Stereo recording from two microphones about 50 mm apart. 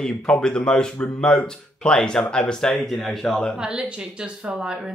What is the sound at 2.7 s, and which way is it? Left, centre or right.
Speech, centre.